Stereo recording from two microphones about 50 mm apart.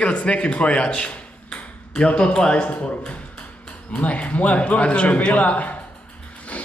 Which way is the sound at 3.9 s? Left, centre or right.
Left.